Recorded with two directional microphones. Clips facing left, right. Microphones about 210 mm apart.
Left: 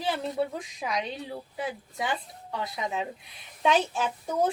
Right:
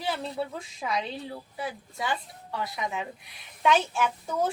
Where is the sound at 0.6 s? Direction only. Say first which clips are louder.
Even; 15° left (ahead or behind).